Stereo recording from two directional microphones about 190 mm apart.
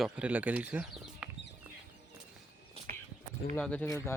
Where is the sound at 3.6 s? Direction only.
5° left (ahead or behind).